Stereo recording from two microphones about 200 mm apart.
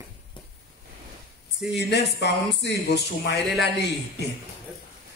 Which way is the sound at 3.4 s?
Centre (ahead or behind).